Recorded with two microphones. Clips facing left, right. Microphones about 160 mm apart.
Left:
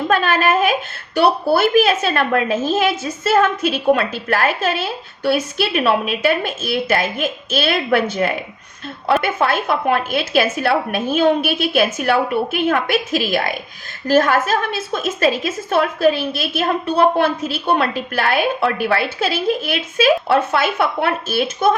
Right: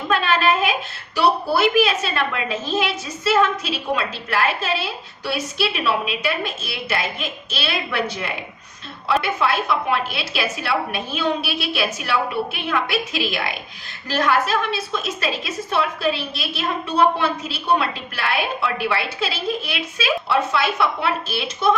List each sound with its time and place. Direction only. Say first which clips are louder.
0.1 s a woman's voice: left 1 dB; 50° left (ahead or behind)